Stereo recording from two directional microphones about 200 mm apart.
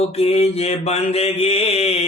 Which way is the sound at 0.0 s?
30° left (ahead or behind).